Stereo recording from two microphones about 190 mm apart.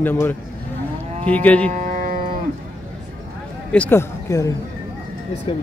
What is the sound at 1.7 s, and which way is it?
Music, 45° right (ahead or behind).